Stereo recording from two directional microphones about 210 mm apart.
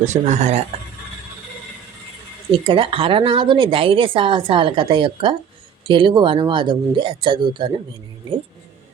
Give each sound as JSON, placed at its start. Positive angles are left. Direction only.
{"t": 0.0, "sound": "speech", "side_deg": -35}
{"t": 2.5, "sound": "speech", "side_deg": -25}